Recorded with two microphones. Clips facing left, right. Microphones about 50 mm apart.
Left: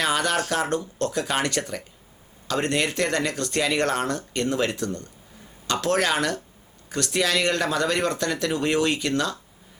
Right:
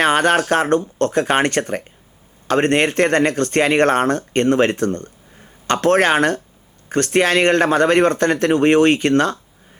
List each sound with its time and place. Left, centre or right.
0.0 s speech: right